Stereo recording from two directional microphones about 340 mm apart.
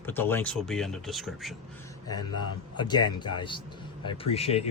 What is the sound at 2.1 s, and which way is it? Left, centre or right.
Speech, centre.